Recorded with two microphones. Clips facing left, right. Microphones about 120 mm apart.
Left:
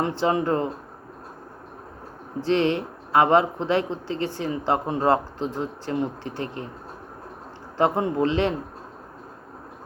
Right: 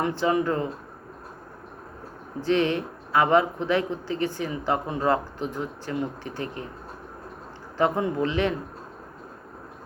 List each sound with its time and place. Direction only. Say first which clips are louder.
0.0 s speech: left 1 dB; 25° left (ahead or behind)
2.4 s speech: left 1 dB; 25° left (ahead or behind)
7.8 s speech: left 2 dB; 25° left (ahead or behind)